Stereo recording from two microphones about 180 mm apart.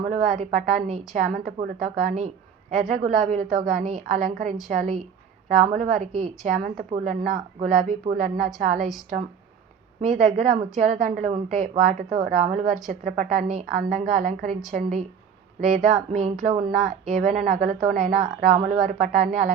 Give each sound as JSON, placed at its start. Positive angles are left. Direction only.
{"t": 0.1, "sound": "a woman's voice", "side_deg": -45}
{"t": 10.0, "sound": "a woman's voice", "side_deg": -45}
{"t": 16.5, "sound": "speech", "side_deg": -25}
{"t": 16.7, "sound": "a woman's voice", "side_deg": -45}